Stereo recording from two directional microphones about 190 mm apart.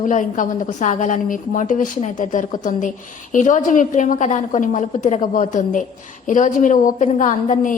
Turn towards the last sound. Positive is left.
turn(degrees=45)  # may be behind; listen again after turning